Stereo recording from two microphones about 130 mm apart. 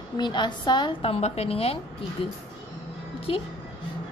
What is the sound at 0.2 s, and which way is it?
Speech, 35° left (ahead or behind).